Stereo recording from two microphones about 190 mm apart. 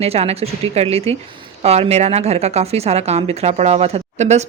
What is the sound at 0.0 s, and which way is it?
Speech, 35° right (ahead or behind).